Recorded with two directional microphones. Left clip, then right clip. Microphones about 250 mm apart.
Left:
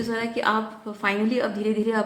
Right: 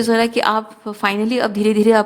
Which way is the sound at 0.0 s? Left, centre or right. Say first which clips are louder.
Right 9 dB; right.